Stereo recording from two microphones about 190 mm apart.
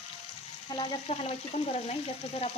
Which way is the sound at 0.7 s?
25° left (ahead or behind).